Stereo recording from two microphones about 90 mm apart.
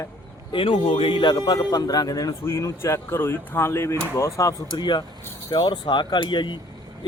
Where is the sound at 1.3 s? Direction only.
45° left (ahead or behind).